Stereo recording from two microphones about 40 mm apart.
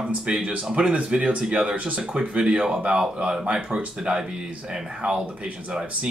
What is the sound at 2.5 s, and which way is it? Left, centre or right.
Speech, centre.